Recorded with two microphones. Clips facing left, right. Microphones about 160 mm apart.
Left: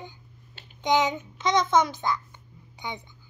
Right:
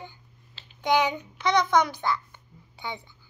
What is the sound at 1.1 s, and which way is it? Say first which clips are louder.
A child's voice: even; 20° left (ahead or behind).